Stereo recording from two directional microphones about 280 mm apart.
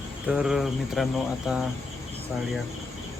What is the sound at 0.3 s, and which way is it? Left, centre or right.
Speech, centre.